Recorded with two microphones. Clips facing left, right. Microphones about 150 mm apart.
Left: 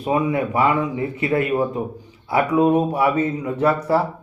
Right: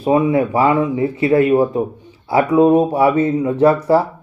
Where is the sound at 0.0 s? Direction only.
30° right (ahead or behind).